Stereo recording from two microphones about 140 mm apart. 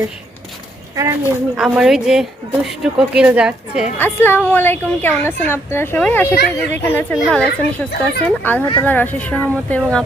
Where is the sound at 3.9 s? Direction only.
15° left (ahead or behind).